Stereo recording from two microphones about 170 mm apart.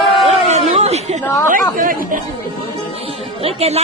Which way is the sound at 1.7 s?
55° right (ahead or behind).